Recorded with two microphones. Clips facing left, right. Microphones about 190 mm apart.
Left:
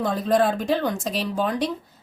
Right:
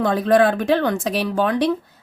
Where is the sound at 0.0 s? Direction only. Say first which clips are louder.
Right 5 dB; 70° right (ahead or behind).